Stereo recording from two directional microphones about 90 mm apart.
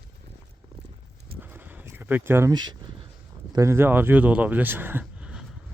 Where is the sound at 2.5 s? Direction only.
50° right (ahead or behind).